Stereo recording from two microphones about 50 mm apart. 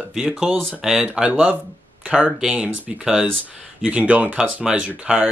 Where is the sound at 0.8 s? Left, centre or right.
Centre.